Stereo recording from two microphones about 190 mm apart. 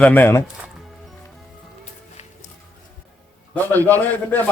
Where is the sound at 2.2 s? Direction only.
35° left (ahead or behind).